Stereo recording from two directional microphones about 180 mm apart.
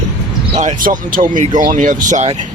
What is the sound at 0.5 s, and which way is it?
Speech, 40° right (ahead or behind).